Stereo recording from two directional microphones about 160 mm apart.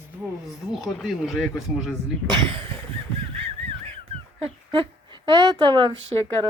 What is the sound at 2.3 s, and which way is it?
Speech, 30° right (ahead or behind).